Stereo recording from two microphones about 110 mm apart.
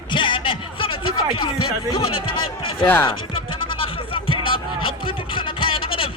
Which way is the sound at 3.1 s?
55° left (ahead or behind).